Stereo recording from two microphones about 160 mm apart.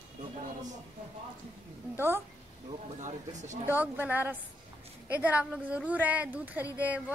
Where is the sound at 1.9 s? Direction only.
15° right (ahead or behind).